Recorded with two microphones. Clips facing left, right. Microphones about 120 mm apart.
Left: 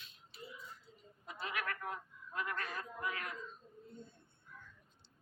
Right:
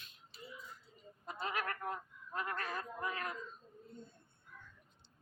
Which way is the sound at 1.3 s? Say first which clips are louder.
Right 2 dB; 35° right (ahead or behind).